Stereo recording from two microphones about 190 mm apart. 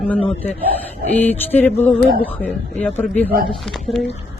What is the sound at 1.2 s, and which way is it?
A man's voice, 10° left (ahead or behind).